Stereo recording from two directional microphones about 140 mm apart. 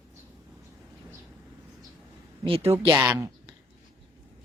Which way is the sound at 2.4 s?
45° right (ahead or behind).